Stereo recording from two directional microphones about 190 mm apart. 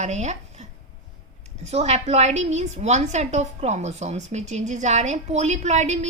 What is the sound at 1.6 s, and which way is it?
A woman's voice, 35° right (ahead or behind).